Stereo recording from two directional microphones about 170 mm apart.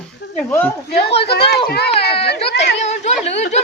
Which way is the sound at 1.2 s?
70° left (ahead or behind).